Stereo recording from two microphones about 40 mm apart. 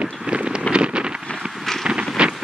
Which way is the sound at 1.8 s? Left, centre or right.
Right.